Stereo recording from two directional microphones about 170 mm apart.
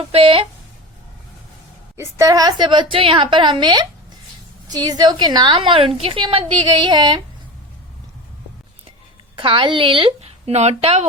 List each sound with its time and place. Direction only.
0.0 s speech: 30° right (ahead or behind)
2.0 s a woman's voice: 20° right (ahead or behind)
9.4 s speech: 30° right (ahead or behind)